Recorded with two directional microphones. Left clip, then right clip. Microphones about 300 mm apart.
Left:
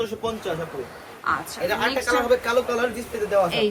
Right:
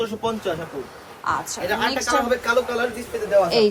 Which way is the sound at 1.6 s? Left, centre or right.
Centre.